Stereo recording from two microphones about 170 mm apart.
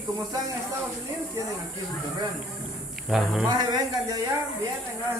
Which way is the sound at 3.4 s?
25° right (ahead or behind).